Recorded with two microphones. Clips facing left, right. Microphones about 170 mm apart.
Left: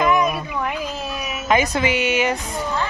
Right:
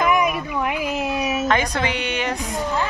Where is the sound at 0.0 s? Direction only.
10° right (ahead or behind).